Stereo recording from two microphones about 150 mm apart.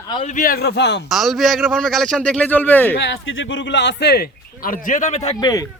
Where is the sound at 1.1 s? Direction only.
Centre (ahead or behind).